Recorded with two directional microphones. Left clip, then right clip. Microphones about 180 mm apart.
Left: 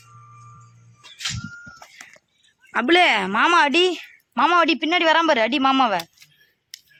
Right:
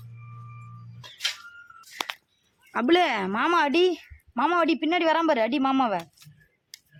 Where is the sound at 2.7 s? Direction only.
5° left (ahead or behind); by 6.0 s 20° left (ahead or behind).